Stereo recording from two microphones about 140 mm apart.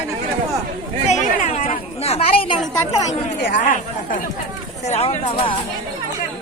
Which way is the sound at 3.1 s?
70° left (ahead or behind).